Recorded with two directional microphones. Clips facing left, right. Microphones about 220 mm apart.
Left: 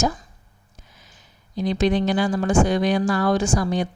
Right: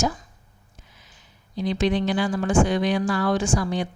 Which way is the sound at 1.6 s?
45° left (ahead or behind).